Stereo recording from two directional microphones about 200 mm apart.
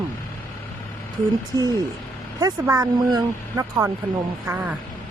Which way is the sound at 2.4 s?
15° right (ahead or behind).